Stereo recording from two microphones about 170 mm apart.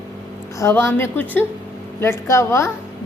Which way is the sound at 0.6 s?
15° left (ahead or behind).